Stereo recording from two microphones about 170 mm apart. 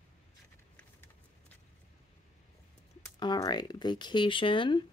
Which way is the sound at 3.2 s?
25° left (ahead or behind).